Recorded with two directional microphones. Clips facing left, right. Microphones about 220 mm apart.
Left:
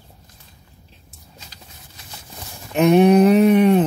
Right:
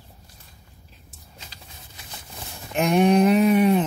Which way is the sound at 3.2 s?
40° left (ahead or behind).